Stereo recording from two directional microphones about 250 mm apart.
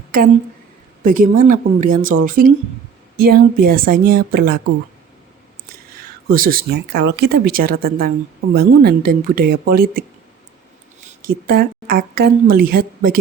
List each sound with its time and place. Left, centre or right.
1.0 s a woman's voice: right
6.3 s a woman's voice: right
11.2 s a woman's voice: right